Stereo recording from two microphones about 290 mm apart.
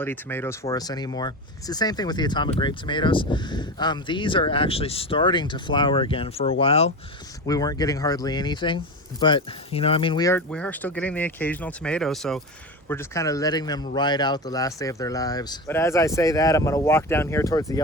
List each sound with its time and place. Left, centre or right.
0.0 s speech: centre